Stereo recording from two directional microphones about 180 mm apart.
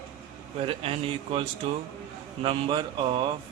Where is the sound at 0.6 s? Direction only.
30° right (ahead or behind).